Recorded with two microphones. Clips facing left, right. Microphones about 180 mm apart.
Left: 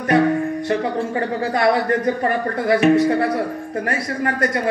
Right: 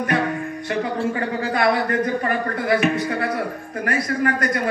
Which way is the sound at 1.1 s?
35° left (ahead or behind).